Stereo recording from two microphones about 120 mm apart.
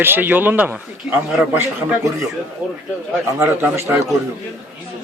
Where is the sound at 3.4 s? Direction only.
20° right (ahead or behind).